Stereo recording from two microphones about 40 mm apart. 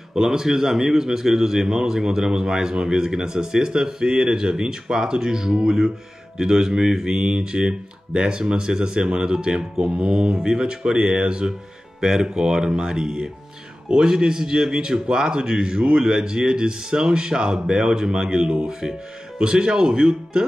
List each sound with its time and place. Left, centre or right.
0.1 s a man's voice: centre